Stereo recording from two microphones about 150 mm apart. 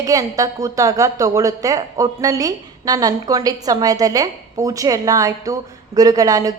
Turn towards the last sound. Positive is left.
turn(degrees=-25)  # may be behind; listen again after turning